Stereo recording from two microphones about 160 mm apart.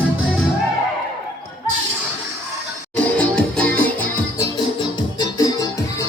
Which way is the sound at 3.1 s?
10° left (ahead or behind).